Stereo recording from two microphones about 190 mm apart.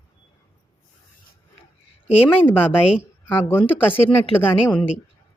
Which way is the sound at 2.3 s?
10° left (ahead or behind).